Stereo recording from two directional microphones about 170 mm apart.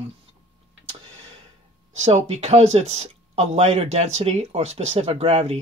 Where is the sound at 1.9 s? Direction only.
40° right (ahead or behind).